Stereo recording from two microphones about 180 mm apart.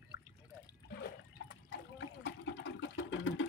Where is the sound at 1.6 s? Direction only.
85° left.